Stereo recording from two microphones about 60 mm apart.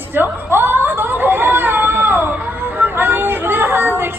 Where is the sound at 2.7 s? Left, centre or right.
Right.